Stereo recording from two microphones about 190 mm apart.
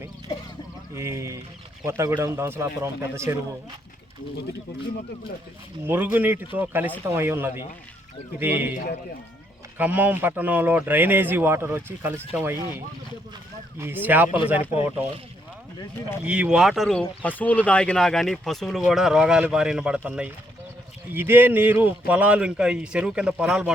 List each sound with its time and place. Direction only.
0.9 s speech: 15° right (ahead or behind)
5.8 s speech: 10° right (ahead or behind)
8.7 s a man's voice: 50° left (ahead or behind)
9.7 s speech: 10° right (ahead or behind)
13.7 s speech: 10° right (ahead or behind)
16.2 s speech: 5° right (ahead or behind)